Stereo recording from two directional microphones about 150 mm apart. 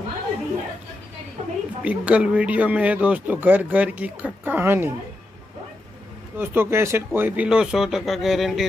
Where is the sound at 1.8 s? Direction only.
10° right (ahead or behind).